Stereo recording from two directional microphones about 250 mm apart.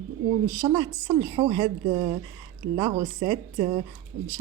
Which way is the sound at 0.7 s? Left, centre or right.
Centre.